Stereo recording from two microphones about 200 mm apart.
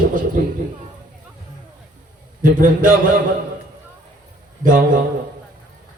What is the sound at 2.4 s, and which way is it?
Speech, 40° right (ahead or behind).